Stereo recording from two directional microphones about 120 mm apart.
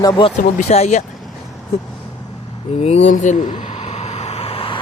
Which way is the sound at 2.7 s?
65° left (ahead or behind).